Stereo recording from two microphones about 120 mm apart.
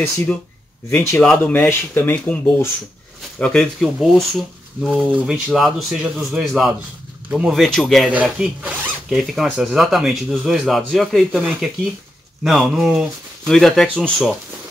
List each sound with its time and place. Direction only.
0.0 s speech: 20° left (ahead or behind); by 8.1 s 5° left (ahead or behind)
8.1 s speech: 10° right (ahead or behind)